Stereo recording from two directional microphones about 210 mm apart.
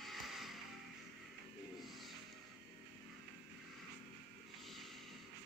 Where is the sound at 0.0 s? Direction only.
Centre (ahead or behind).